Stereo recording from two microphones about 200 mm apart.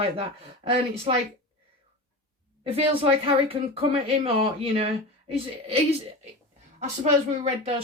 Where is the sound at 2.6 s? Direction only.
30° right (ahead or behind).